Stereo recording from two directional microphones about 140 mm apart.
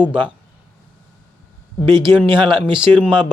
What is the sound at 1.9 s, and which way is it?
Speech, 35° right (ahead or behind).